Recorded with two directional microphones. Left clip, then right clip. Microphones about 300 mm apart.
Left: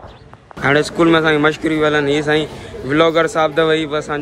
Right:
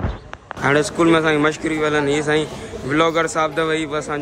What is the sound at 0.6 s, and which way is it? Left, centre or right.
A man's voice, centre.